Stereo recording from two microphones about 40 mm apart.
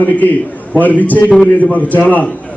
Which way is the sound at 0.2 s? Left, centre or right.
Left.